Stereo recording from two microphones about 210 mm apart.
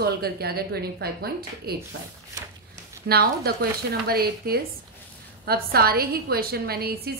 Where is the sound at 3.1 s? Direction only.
50° right (ahead or behind).